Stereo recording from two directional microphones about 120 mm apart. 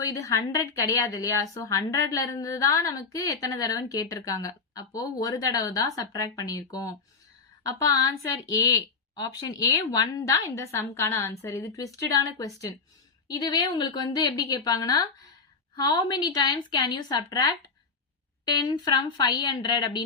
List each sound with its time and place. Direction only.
0.0 s a woman's voice: 25° left (ahead or behind)
18.6 s a woman's voice: 35° left (ahead or behind)